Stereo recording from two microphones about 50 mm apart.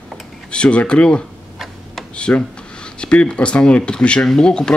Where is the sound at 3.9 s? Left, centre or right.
Centre.